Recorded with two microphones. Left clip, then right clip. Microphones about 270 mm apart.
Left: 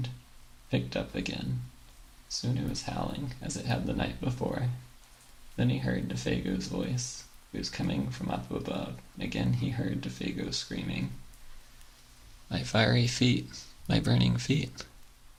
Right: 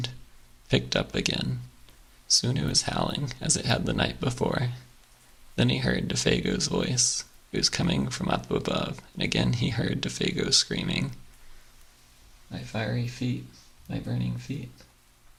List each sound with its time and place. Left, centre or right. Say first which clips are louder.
0.7 s speech: right 7 dB; right
12.5 s speech: left 6 dB; centre